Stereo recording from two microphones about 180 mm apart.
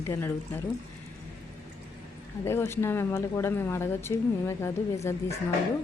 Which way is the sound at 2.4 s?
15° left (ahead or behind).